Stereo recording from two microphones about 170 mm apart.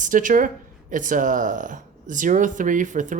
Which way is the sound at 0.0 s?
50° right (ahead or behind).